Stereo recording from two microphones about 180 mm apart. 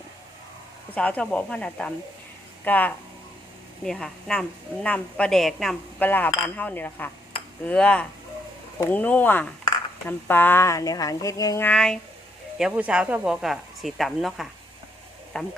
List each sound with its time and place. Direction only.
0.9 s a woman's voice: 10° left (ahead or behind)
12.5 s a woman's voice: 5° right (ahead or behind)